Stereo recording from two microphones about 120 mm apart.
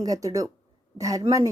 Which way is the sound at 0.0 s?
30° right (ahead or behind).